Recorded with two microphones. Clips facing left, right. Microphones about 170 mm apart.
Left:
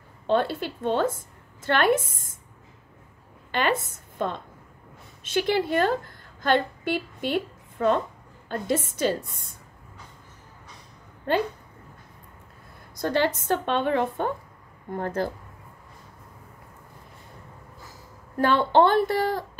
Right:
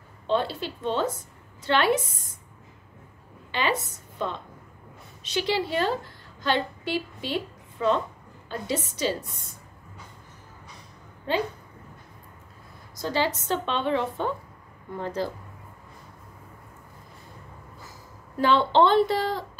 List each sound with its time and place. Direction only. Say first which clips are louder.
0.3 s a woman's voice: left 2 dB; 50° left (ahead or behind)
3.5 s a woman's voice: left 2 dB; 55° left (ahead or behind)
11.3 s a woman's voice: left 2 dB; 55° left (ahead or behind)
12.9 s a woman's voice: left 3 dB; 55° left (ahead or behind)
18.4 s a woman's voice: left 1 dB; 50° left (ahead or behind)